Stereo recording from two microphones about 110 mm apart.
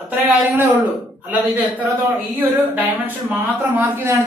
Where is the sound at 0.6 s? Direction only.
15° right (ahead or behind).